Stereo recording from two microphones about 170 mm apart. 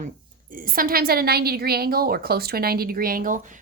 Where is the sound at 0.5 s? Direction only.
55° right (ahead or behind).